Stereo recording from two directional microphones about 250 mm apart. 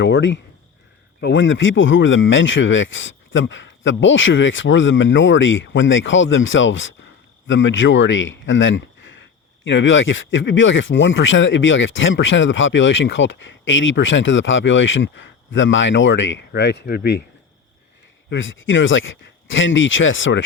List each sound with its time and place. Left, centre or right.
0.0 s speech: left
18.3 s speech: left